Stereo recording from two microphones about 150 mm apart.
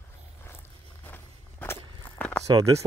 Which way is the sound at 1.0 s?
15° left (ahead or behind).